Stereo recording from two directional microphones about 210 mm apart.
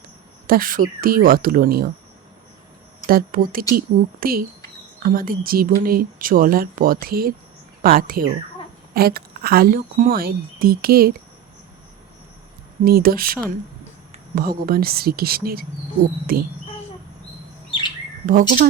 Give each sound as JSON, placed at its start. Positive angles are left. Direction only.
{"t": 0.4, "sound": "speech", "side_deg": -45}
{"t": 3.1, "sound": "speech", "side_deg": -45}
{"t": 12.8, "sound": "speech", "side_deg": -45}
{"t": 16.2, "sound": "cricket", "side_deg": -45}
{"t": 18.3, "sound": "speech", "side_deg": -40}